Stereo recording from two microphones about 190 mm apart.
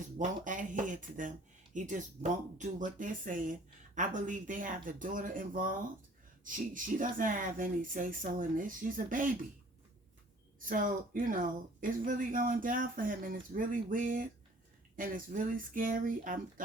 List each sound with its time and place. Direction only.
0.2 s a woman's voice: 45° right (ahead or behind)
10.6 s a woman's voice: 45° right (ahead or behind)